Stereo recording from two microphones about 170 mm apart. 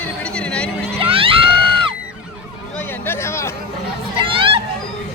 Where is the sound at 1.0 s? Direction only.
30° right (ahead or behind).